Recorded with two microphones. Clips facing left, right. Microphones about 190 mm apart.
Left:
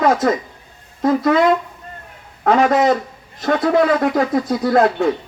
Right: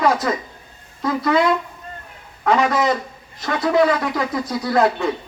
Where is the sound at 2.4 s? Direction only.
50° left (ahead or behind).